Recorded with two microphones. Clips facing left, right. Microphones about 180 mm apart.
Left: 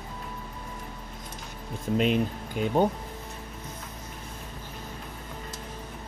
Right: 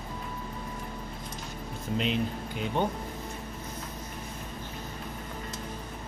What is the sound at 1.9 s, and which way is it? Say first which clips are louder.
Speech: left 5 dB; 50° left (ahead or behind).